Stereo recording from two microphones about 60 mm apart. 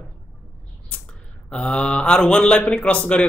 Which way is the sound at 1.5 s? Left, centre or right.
Centre.